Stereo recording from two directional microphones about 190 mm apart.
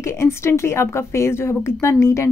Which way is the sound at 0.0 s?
15° left (ahead or behind).